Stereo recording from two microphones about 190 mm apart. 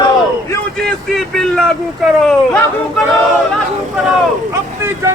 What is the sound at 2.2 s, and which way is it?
Speech, centre (ahead or behind).